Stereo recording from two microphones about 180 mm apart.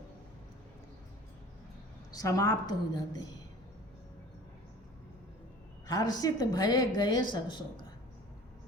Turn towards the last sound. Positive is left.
turn(degrees=25)  # may be behind; listen again after turning